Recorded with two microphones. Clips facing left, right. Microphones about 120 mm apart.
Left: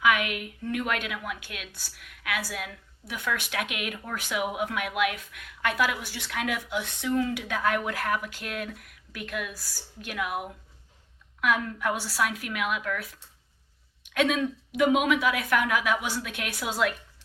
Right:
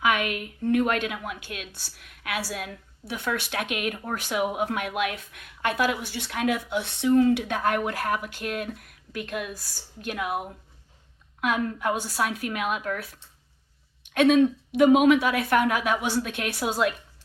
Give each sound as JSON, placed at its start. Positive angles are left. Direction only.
{"t": 0.0, "sound": "a woman's voice", "side_deg": -30}